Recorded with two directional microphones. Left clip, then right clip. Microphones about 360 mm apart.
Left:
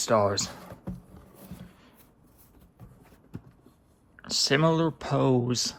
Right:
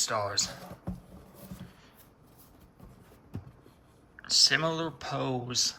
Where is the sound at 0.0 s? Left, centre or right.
Centre.